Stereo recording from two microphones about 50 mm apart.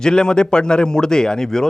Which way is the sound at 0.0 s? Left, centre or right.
Centre.